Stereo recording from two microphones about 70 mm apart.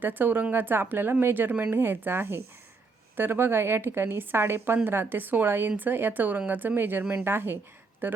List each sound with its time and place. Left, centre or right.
0.0 s a woman's voice: right